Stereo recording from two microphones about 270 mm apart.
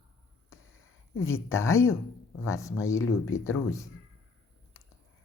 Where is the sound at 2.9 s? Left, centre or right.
Left.